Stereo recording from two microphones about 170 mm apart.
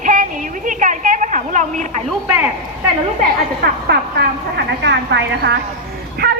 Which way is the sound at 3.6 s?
75° right (ahead or behind).